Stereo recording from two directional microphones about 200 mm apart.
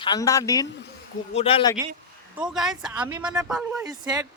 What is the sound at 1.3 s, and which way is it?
Speech, 30° left (ahead or behind).